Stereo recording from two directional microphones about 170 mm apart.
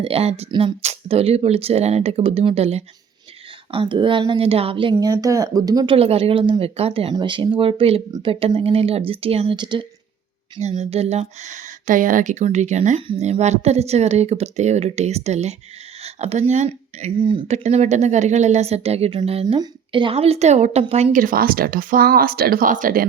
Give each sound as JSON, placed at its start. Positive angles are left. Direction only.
{"t": 0.0, "sound": "a woman's voice", "side_deg": -35}
{"t": 10.6, "sound": "speech", "side_deg": -40}
{"t": 21.2, "sound": "speech", "side_deg": -55}